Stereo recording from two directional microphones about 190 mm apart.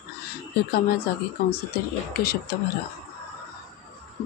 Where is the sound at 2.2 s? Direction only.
55° left (ahead or behind).